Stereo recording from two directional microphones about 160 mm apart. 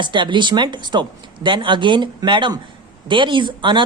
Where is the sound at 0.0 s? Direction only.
30° right (ahead or behind).